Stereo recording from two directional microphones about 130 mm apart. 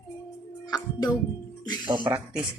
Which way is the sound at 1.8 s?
35° right (ahead or behind).